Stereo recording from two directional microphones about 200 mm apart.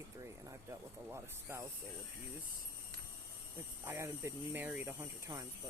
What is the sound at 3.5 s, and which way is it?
Speech, 15° right (ahead or behind).